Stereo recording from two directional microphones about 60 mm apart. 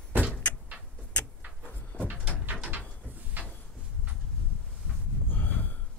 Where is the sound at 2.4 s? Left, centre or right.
Right.